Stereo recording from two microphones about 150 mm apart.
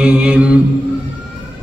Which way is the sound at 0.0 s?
5° right (ahead or behind).